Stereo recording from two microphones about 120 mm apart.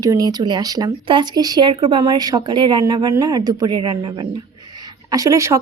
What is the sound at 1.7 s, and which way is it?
A woman's voice, 45° right (ahead or behind).